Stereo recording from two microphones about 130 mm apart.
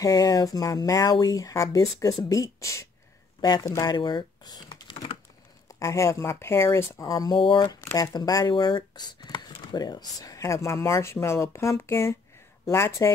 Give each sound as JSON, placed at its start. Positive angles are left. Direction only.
{"t": 0.0, "sound": "speech", "side_deg": 25}
{"t": 5.8, "sound": "speech", "side_deg": 25}
{"t": 7.8, "sound": "speech", "side_deg": 25}